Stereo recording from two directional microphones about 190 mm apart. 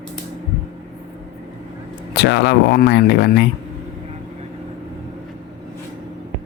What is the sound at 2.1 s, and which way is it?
Speech, 65° left (ahead or behind).